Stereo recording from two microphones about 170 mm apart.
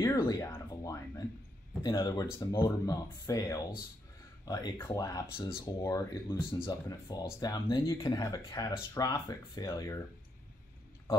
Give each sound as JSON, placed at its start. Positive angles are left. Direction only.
{"t": 0.0, "sound": "speech", "side_deg": 20}